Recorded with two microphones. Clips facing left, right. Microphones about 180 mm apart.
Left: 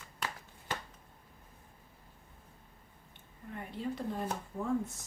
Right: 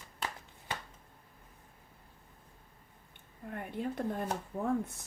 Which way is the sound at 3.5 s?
55° right (ahead or behind).